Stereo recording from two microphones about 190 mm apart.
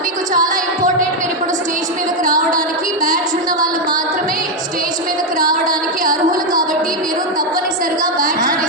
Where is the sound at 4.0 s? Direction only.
45° right (ahead or behind).